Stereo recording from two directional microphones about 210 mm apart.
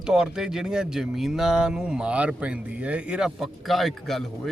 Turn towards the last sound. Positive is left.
turn(degrees=0)  # may be behind; listen again after turning